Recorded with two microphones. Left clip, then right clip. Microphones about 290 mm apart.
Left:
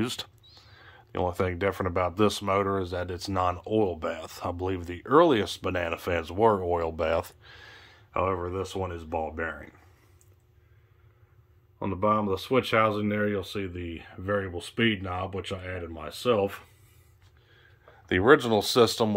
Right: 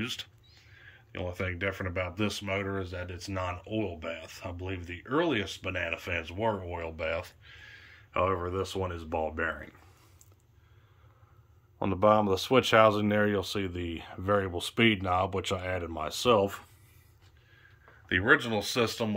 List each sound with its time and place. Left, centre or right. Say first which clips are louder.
0.0 s speech: left 4 dB; left
8.1 s speech: left 1 dB; centre
11.8 s speech: right 2 dB; centre
18.0 s speech: left 4 dB; centre